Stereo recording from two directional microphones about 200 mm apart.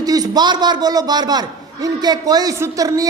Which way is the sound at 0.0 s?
20° right (ahead or behind).